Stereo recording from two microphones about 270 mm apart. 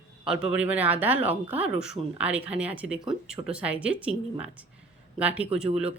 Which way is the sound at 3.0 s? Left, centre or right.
Centre.